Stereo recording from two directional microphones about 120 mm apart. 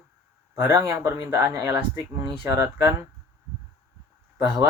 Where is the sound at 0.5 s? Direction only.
20° right (ahead or behind).